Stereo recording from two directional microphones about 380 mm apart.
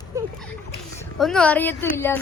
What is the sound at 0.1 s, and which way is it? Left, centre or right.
Splash, centre.